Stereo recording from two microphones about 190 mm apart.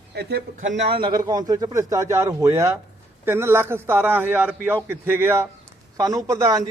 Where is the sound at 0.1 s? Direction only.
60° right (ahead or behind).